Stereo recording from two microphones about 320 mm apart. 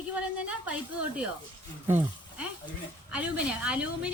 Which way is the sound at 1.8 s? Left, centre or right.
Centre.